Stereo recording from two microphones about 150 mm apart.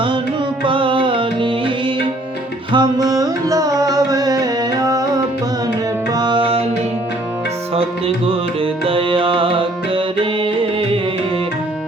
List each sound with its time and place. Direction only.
0.6 s music: 35° right (ahead or behind)
2.7 s music: 25° right (ahead or behind)
7.8 s music: 40° right (ahead or behind)